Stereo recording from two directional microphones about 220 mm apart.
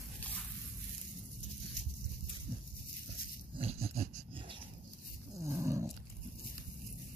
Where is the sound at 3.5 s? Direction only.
25° right (ahead or behind).